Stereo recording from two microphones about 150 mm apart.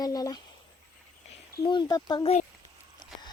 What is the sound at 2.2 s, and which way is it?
Speech, 45° left (ahead or behind).